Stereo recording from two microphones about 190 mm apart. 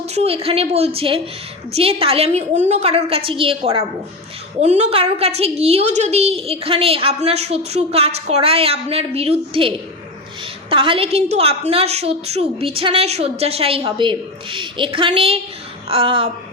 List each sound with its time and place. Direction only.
0.0 s a woman's voice: 35° right (ahead or behind)